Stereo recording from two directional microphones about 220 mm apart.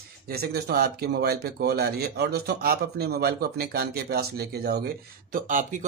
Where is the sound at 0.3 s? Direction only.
45° right (ahead or behind).